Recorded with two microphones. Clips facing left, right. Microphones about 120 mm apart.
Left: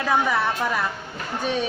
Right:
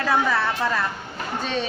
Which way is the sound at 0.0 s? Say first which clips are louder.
Even; 15° left (ahead or behind).